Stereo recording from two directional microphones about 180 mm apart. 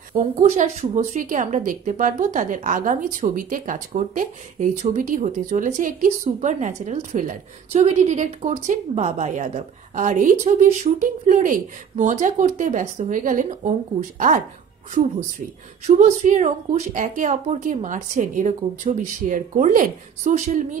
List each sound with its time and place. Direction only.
0.4 s a woman's voice: 40° right (ahead or behind)
16.0 s a woman's voice: 40° right (ahead or behind)